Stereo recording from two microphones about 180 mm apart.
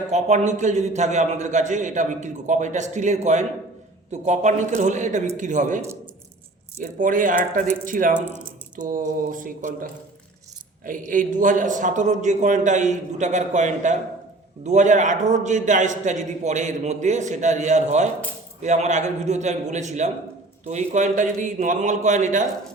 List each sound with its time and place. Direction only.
0.1 s a man's voice: 40° right (ahead or behind)